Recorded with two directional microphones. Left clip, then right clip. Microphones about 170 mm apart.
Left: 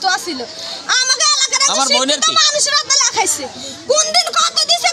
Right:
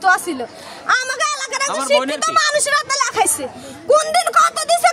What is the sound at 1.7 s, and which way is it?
Speech, 65° left (ahead or behind).